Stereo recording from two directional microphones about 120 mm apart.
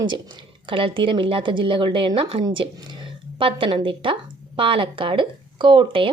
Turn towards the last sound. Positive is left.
turn(degrees=-45)  # may be behind; listen again after turning